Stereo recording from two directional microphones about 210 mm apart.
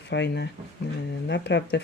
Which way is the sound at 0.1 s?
55° left (ahead or behind).